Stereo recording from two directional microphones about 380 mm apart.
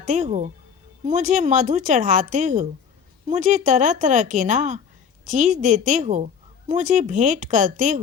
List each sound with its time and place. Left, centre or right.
0.0 s a woman's voice: centre